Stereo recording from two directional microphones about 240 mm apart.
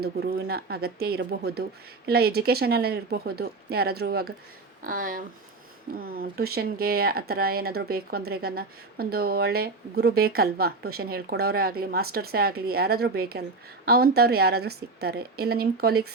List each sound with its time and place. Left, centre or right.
0.0 s speech: right